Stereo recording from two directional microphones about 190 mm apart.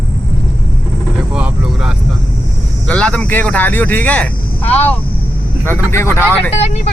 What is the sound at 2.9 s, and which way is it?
Speech, 5° left (ahead or behind).